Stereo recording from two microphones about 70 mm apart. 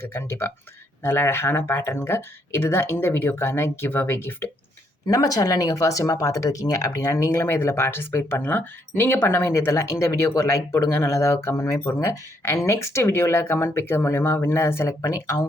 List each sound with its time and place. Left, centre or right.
0.1 s speech: left
5.0 s speech: left
14.8 s speech: left